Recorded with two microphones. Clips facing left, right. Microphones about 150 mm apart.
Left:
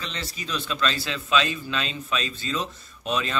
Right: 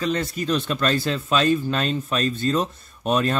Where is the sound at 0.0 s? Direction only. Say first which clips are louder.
Right 11 dB; 50° right (ahead or behind).